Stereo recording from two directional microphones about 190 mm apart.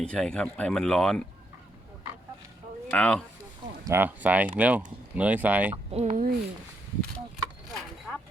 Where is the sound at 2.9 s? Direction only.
5° left (ahead or behind).